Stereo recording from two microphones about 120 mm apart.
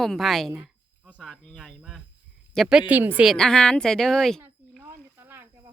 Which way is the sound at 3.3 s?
5° left (ahead or behind).